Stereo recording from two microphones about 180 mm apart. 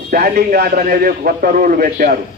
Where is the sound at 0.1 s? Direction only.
60° right (ahead or behind).